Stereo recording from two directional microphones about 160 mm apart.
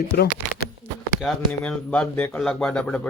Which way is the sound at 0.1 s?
70° left (ahead or behind).